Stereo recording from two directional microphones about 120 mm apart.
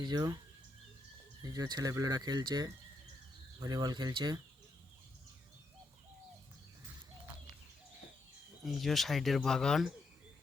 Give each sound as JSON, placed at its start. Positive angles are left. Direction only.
{"t": 0.0, "sound": "speech", "side_deg": -35}
{"t": 1.4, "sound": "speech", "side_deg": -30}
{"t": 8.6, "sound": "speech", "side_deg": 0}